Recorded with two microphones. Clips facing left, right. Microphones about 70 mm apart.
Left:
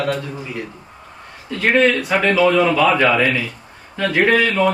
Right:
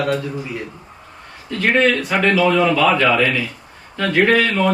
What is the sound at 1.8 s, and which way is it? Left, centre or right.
Speech, centre.